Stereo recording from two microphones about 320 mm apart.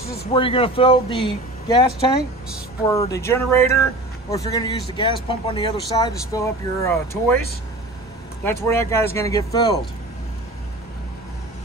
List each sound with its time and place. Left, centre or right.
0.0 s a sound: left
0.3 s speech: centre
8.5 s speech: centre